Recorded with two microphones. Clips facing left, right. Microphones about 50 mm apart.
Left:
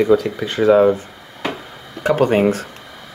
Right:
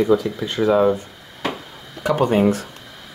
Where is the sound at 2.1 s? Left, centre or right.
Left.